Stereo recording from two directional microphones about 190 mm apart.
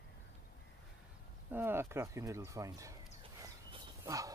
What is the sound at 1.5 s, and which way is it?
Speech, 10° right (ahead or behind).